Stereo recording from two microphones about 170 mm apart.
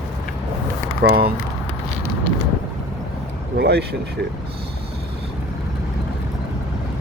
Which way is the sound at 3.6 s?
75° right (ahead or behind).